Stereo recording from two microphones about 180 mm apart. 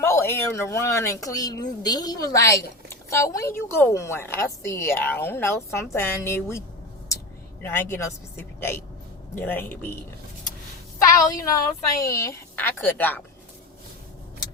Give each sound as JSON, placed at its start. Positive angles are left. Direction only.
{"t": 0.0, "sound": "a woman's voice", "side_deg": 15}
{"t": 7.6, "sound": "a woman's voice", "side_deg": 10}
{"t": 11.3, "sound": "a woman's voice", "side_deg": 20}